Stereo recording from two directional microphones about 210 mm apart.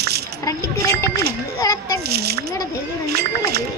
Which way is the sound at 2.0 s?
50° right (ahead or behind).